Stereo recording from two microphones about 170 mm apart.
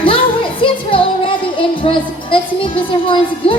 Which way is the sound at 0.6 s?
30° left (ahead or behind).